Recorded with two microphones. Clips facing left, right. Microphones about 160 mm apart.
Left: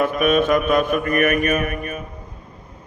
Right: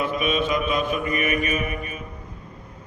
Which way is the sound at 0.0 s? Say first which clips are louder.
Left 6 dB; 50° left (ahead or behind).